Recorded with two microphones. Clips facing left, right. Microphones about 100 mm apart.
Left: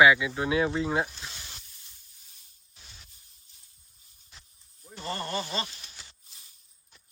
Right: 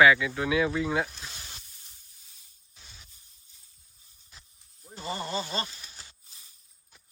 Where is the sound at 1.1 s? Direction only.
Centre (ahead or behind).